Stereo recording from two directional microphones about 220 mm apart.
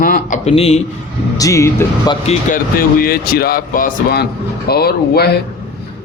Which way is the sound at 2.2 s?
40° left (ahead or behind).